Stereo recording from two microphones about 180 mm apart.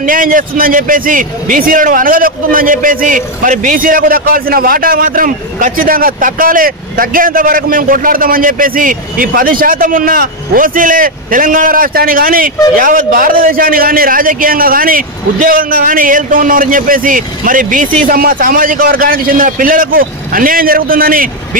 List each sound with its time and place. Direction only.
0.0 s a man's voice: 50° right (ahead or behind)